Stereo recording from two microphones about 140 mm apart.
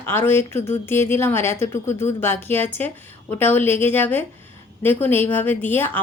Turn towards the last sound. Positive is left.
turn(degrees=15)  # may be behind; listen again after turning